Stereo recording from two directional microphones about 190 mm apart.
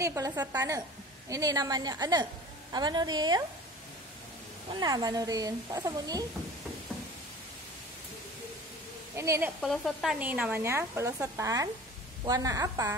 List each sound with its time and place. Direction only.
0.0 s speech: 15° right (ahead or behind)
4.7 s speech: 20° right (ahead or behind)
9.1 s speech: 15° right (ahead or behind)
9.6 s speech: centre (ahead or behind); by 12.9 s 15° right (ahead or behind)